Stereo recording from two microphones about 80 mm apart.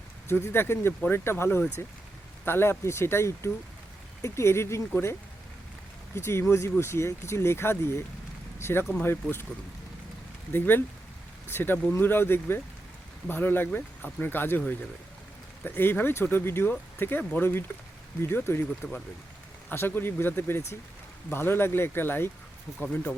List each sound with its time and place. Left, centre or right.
0.3 s speech: left
6.1 s speech: left
10.5 s speech: left